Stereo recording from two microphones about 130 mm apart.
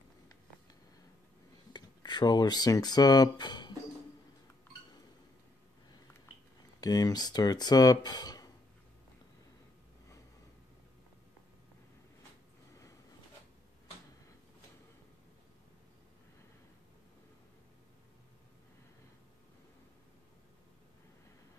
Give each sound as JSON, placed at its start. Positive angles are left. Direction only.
{"t": 1.7, "sound": "speech", "side_deg": 35}
{"t": 6.8, "sound": "speech", "side_deg": 30}